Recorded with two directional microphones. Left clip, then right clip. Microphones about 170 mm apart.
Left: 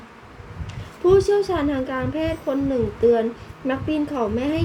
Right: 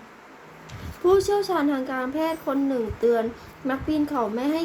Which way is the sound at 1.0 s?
5° left (ahead or behind).